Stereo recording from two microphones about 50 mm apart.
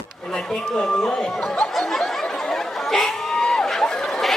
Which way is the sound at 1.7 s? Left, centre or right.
Centre.